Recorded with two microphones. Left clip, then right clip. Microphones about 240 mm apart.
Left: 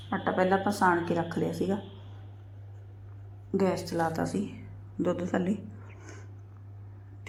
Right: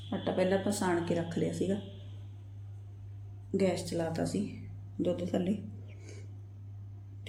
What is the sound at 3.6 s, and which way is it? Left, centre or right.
Speech, centre.